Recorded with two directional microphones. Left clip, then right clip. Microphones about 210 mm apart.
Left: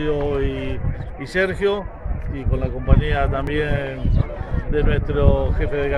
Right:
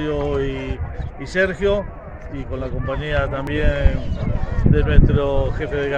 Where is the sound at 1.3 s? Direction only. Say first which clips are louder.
Right 1 dB; 30° left (ahead or behind).